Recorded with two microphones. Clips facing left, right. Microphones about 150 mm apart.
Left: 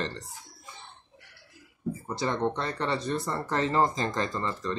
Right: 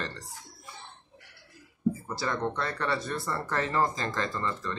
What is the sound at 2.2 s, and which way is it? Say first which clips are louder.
Speech: left 2 dB; 20° left (ahead or behind).